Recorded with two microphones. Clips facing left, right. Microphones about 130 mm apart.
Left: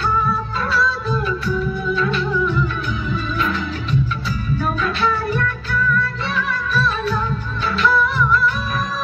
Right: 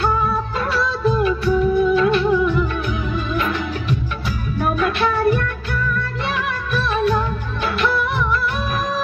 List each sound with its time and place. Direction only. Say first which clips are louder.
0.7 s music: right 1 dB; 55° right (ahead or behind)
4.7 s music: right 3 dB; 55° right (ahead or behind)
6.3 s music of bollywood: left 3 dB; 55° right (ahead or behind)
7.6 s music: left 2 dB; 60° right (ahead or behind)